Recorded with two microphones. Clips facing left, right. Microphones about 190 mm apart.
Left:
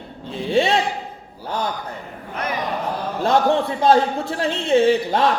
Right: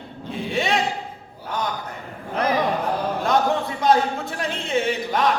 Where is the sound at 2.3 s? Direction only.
35° right (ahead or behind).